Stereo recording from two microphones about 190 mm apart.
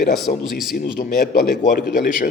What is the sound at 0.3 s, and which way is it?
A man's voice, 45° left (ahead or behind).